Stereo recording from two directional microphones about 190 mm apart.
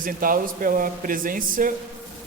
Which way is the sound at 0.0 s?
45° right (ahead or behind).